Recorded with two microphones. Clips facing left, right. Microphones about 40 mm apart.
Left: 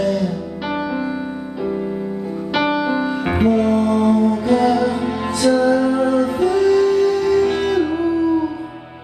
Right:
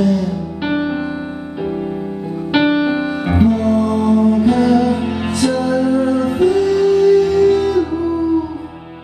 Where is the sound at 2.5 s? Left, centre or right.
Right.